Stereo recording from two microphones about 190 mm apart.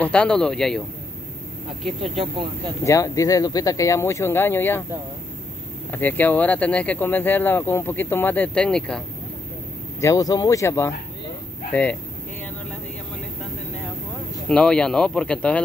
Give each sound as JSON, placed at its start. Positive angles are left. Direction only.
{"t": 0.0, "sound": "speech", "side_deg": 5}
{"t": 2.1, "sound": "speech", "side_deg": -25}
{"t": 2.8, "sound": "speech", "side_deg": 15}
{"t": 5.9, "sound": "speech", "side_deg": 10}
{"t": 9.9, "sound": "speech", "side_deg": 15}
{"t": 14.5, "sound": "speech", "side_deg": 5}